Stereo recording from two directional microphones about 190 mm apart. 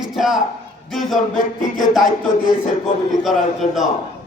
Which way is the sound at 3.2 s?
Centre (ahead or behind).